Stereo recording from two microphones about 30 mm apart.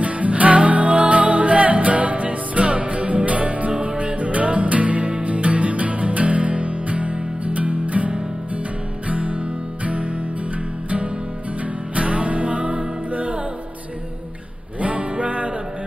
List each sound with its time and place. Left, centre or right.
0.0 s music: right
9.1 s music: right
11.9 s music: right
14.8 s music: right